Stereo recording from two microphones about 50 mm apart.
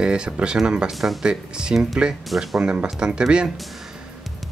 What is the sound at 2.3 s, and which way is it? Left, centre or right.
Speech, centre.